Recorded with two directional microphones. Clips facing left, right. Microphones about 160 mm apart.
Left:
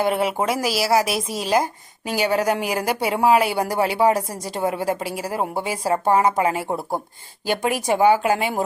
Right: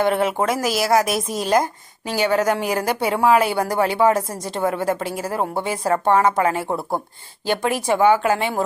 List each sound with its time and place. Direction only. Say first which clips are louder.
0.0 s a woman's voice: right 2 dB; 10° left (ahead or behind)
0.6 s speech: right 1 dB; 50° right (ahead or behind)
0.9 s a woman's voice: right 1 dB; 5° left (ahead or behind)
1.1 s speech: right 2 dB; 45° right (ahead or behind)
1.5 s a woman's voice: right 1 dB; 5° left (ahead or behind)